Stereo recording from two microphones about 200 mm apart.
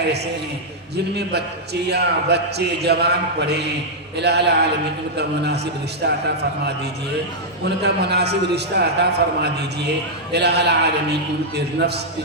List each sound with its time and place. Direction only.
1.1 s a man's voice: 55° right (ahead or behind)
7.8 s a man's voice: 55° right (ahead or behind)